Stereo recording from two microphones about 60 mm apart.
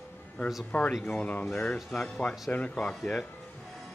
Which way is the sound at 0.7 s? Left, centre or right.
Left.